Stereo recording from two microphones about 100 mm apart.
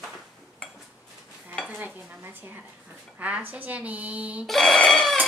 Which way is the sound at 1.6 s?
15° right (ahead or behind).